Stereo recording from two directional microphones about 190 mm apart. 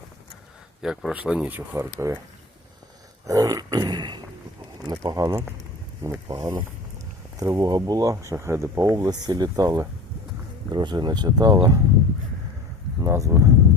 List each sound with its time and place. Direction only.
0.8 s speech: 5° right (ahead or behind)
3.2 s a sound: 20° right (ahead or behind)
4.9 s speech: 20° right (ahead or behind)
13.0 s speech: 15° right (ahead or behind)